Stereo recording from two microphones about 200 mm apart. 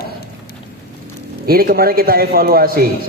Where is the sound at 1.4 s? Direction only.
45° right (ahead or behind).